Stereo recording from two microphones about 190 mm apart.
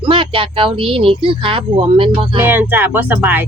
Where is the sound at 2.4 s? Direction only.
10° right (ahead or behind).